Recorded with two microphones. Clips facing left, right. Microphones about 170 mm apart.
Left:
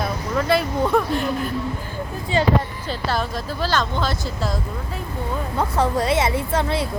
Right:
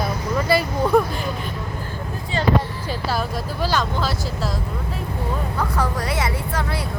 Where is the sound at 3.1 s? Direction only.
10° right (ahead or behind).